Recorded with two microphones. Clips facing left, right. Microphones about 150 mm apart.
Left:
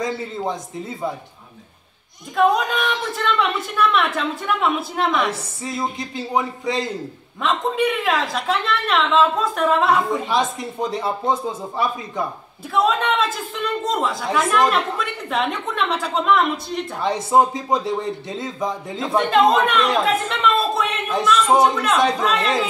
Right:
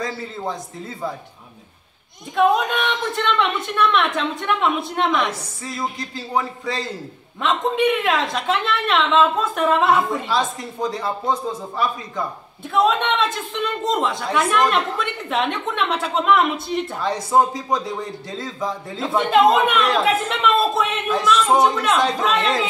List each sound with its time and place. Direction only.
0.0 s speech: 20° left (ahead or behind)
2.3 s speech: centre (ahead or behind)
5.3 s speech: 20° left (ahead or behind)
7.4 s speech: centre (ahead or behind)
10.3 s speech: 20° left (ahead or behind)
12.7 s speech: centre (ahead or behind)
17.0 s speech: 20° left (ahead or behind)
18.9 s speech: centre (ahead or behind)